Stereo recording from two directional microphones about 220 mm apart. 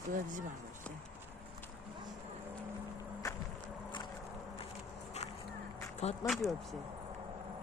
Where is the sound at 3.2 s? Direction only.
15° left (ahead or behind).